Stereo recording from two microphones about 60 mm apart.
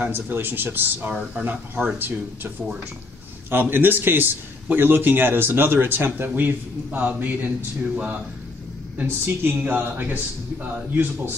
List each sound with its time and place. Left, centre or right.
0.0 s a man's voice: right
9.0 s a man's voice: right